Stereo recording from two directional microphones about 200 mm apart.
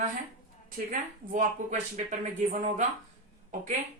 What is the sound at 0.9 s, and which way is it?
Speech, 40° right (ahead or behind).